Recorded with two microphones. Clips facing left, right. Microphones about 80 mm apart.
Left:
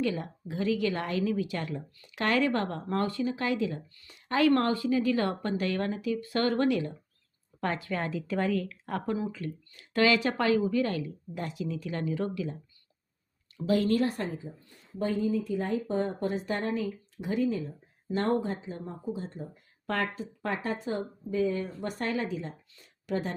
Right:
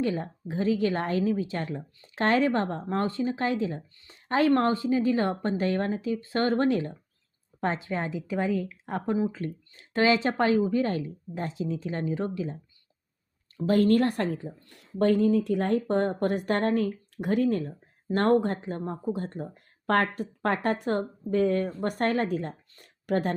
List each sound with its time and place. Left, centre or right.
0.0 s speech: right
13.7 s speech: right